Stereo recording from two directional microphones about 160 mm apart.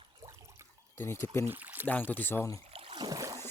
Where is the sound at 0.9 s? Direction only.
15° left (ahead or behind).